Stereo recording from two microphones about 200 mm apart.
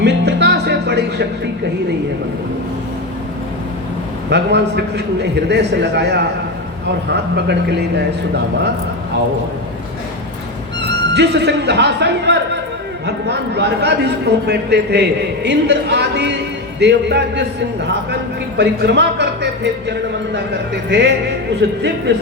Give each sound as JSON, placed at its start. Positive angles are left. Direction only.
{"t": 0.0, "sound": "music", "side_deg": -60}
{"t": 4.3, "sound": "a man's voice", "side_deg": -60}
{"t": 10.8, "sound": "a man's voice", "side_deg": -60}